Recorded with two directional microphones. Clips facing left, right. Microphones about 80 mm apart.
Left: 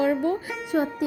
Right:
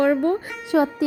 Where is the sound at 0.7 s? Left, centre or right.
Right.